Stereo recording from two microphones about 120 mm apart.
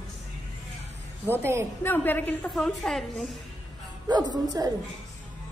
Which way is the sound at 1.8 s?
15° left (ahead or behind).